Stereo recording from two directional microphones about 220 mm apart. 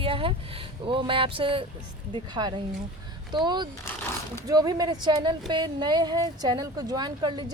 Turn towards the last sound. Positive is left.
turn(degrees=-20)  # may be behind; listen again after turning